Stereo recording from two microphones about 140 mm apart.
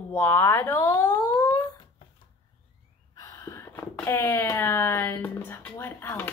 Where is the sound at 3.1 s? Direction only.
25° left (ahead or behind).